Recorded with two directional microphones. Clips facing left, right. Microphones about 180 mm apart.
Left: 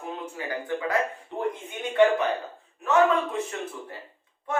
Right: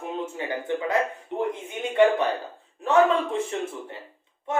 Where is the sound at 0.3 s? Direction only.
25° right (ahead or behind).